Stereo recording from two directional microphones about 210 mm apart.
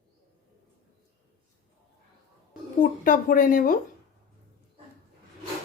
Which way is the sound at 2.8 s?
40° left (ahead or behind).